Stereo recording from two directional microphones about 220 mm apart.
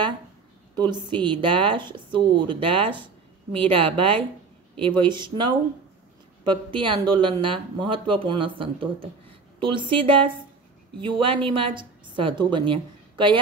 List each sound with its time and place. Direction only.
0.7 s a woman's voice: 20° right (ahead or behind)